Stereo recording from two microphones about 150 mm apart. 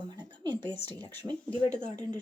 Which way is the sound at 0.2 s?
30° right (ahead or behind).